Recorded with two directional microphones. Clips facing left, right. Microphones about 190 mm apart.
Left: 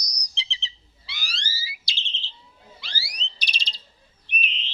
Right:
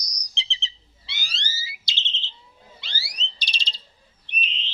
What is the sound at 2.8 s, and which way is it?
Smoke detector, 25° right (ahead or behind).